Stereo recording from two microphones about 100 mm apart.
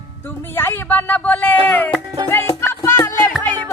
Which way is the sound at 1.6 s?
20° left (ahead or behind).